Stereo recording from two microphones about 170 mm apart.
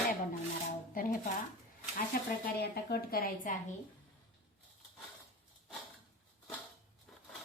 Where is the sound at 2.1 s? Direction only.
55° left (ahead or behind).